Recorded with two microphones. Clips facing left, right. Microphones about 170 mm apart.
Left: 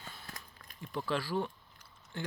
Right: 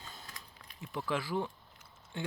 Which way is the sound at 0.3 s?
45° left (ahead or behind).